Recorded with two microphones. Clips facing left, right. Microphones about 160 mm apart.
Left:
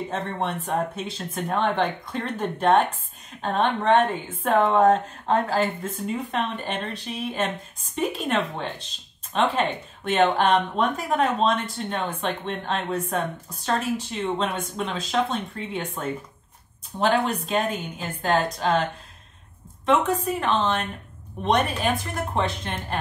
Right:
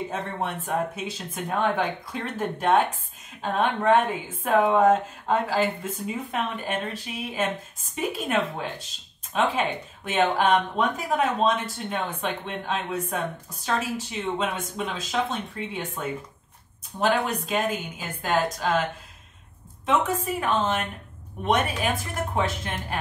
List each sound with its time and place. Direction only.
0.1 s speech: 5° right (ahead or behind)
19.9 s a woman's voice: 5° right (ahead or behind)